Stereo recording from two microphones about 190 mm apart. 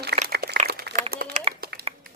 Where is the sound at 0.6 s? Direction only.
55° right (ahead or behind).